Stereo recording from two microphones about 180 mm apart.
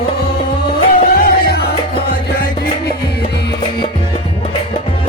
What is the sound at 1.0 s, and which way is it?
Music, 55° left (ahead or behind).